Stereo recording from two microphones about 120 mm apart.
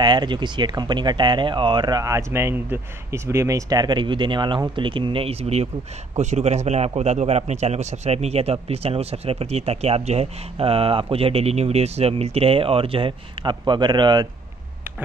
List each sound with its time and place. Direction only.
0.0 s a man's voice: 40° right (ahead or behind)